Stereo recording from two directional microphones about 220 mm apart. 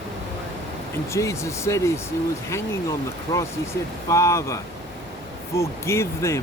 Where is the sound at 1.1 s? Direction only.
15° left (ahead or behind).